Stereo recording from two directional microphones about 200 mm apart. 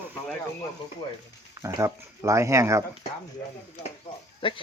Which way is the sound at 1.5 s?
15° right (ahead or behind).